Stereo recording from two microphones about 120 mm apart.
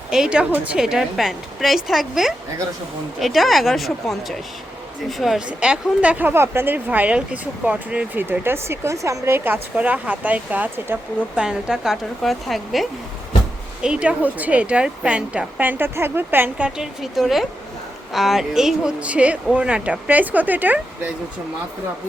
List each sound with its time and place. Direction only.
0.1 s a woman's voice: 5° right (ahead or behind)